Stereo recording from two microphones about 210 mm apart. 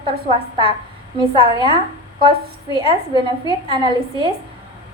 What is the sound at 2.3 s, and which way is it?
A woman's voice, 25° right (ahead or behind).